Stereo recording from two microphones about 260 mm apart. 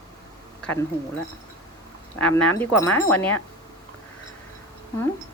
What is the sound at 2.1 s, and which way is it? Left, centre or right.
Speech, centre.